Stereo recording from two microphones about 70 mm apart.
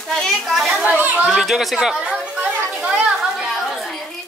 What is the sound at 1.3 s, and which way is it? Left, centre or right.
Speech, centre.